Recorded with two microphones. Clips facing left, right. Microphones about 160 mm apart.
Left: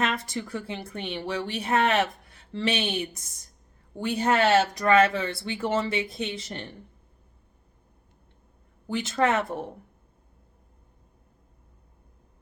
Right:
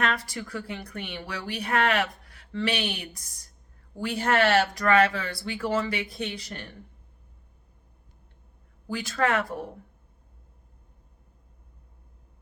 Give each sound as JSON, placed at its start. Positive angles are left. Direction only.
{"t": 0.0, "sound": "a woman's voice", "side_deg": 20}
{"t": 8.9, "sound": "a woman's voice", "side_deg": 25}